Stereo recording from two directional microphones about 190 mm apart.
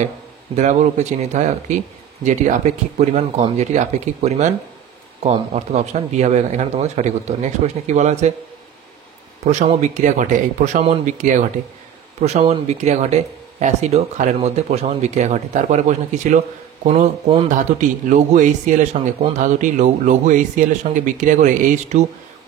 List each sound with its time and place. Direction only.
0.6 s speech: 40° right (ahead or behind)
3.0 s speech: 30° right (ahead or behind)
9.4 s speech: 35° right (ahead or behind)
17.5 s speech: 40° right (ahead or behind)